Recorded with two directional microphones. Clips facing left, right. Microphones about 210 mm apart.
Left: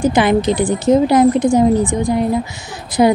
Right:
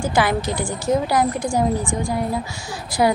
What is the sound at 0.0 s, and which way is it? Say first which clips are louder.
A woman's voice: left 7 dB; 20° left (ahead or behind).